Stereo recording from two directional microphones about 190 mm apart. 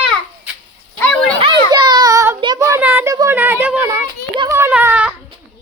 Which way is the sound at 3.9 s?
20° right (ahead or behind).